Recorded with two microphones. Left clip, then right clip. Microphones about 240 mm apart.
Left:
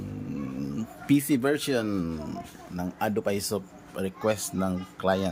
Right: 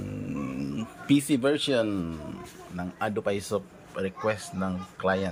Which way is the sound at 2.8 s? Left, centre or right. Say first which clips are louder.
Left 2 dB; left.